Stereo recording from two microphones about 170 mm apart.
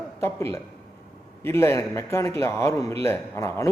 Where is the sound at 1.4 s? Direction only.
15° left (ahead or behind).